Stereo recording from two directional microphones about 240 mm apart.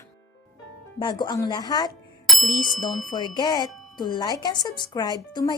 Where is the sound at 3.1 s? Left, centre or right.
Centre.